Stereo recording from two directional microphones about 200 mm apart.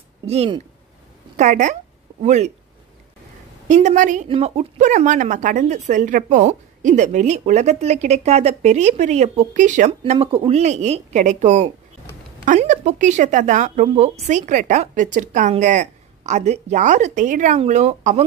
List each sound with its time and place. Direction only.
0.3 s speech: 30° right (ahead or behind)
3.6 s speech: 40° right (ahead or behind)